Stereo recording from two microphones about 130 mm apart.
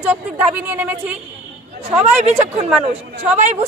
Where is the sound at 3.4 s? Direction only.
65° right (ahead or behind).